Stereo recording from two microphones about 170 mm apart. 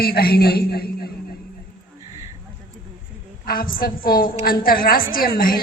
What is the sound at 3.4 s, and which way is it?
A woman's voice, 60° left (ahead or behind).